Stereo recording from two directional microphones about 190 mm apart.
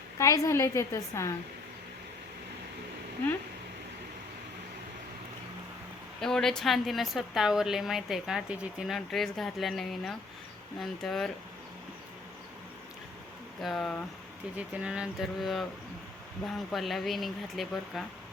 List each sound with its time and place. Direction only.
0.2 s a woman's voice: 15° left (ahead or behind)
6.1 s a woman's voice: 5° left (ahead or behind)
13.6 s a woman's voice: centre (ahead or behind)